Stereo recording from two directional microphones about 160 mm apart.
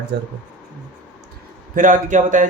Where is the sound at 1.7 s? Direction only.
55° right (ahead or behind).